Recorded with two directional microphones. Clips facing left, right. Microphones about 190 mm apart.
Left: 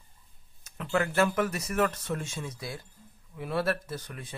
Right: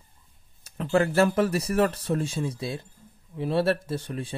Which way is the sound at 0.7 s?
30° right (ahead or behind).